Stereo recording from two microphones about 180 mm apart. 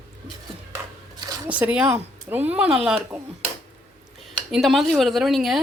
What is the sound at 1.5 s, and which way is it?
Speech, 5° right (ahead or behind).